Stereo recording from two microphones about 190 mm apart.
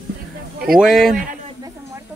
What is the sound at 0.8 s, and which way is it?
Speech, centre (ahead or behind).